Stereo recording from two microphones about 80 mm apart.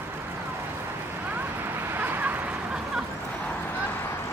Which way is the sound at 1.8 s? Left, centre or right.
Right.